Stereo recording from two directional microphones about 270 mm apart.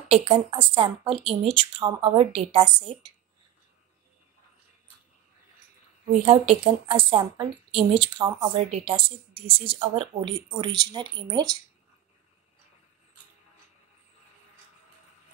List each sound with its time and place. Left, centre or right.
0.1 s a woman's voice: right
6.2 s a woman's voice: centre